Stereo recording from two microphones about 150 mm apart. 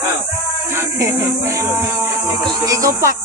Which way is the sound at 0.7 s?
20° right (ahead or behind).